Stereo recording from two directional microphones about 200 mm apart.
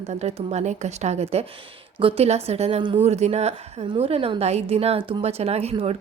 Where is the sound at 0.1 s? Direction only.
35° right (ahead or behind).